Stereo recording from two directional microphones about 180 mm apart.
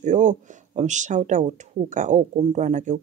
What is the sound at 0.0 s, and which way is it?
Speech, 40° right (ahead or behind).